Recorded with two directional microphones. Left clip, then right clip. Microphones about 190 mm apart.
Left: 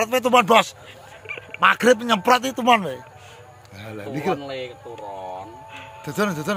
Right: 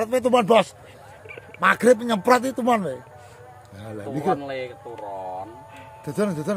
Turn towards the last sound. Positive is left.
turn(degrees=-15)  # may be behind; listen again after turning